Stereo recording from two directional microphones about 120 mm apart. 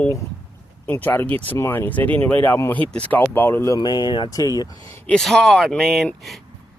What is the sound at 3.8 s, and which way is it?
Speech, 35° left (ahead or behind).